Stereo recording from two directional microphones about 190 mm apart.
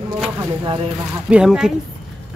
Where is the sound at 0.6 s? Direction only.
25° right (ahead or behind).